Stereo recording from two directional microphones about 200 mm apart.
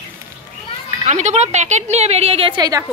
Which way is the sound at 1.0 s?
35° right (ahead or behind).